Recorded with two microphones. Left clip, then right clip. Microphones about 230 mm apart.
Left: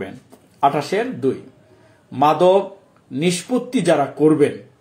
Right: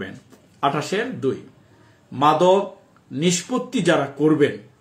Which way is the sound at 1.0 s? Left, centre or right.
Right.